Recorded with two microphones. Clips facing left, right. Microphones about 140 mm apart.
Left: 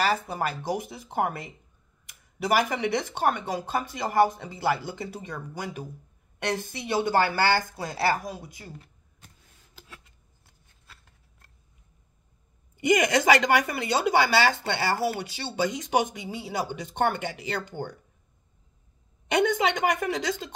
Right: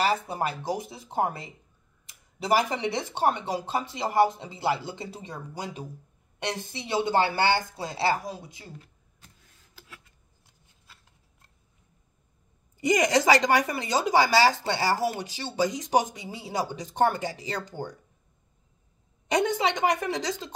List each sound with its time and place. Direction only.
0.0 s speech: 25° right (ahead or behind)
12.7 s speech: 35° right (ahead or behind)
19.2 s speech: 35° right (ahead or behind)